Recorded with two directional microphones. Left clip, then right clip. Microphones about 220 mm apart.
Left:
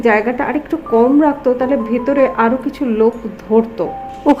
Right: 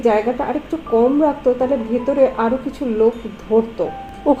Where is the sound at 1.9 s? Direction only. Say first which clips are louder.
Left 2 dB; 20° left (ahead or behind).